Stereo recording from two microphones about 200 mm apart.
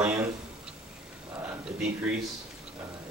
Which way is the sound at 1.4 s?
5° right (ahead or behind).